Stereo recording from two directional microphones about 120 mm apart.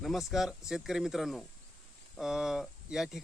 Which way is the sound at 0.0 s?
Centre (ahead or behind).